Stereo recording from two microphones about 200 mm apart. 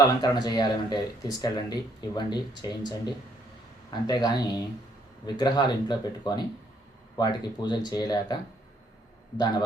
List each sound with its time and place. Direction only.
0.0 s speech: 20° left (ahead or behind)